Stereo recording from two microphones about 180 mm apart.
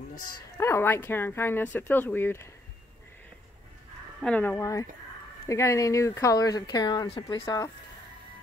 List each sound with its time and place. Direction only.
0.6 s speech: 15° left (ahead or behind)
4.2 s speech: 10° left (ahead or behind)